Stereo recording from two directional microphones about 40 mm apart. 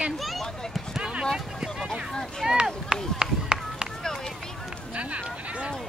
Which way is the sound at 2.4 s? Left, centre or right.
Centre.